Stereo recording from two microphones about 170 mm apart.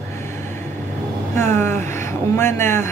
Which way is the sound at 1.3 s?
15° left (ahead or behind).